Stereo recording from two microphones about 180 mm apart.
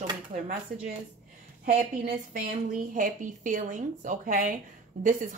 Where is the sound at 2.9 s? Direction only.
45° right (ahead or behind).